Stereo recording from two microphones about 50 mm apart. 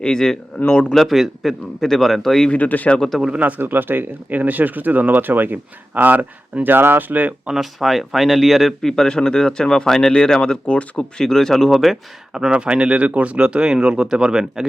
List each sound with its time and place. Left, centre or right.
0.0 s speech: centre
0.9 s a man's voice: centre
2.5 s speech: left
3.2 s speech: centre
3.6 s speech: right
7.5 s speech: centre
12.3 s speech: centre